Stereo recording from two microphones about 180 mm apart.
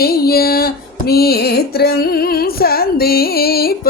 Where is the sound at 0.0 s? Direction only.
55° left (ahead or behind).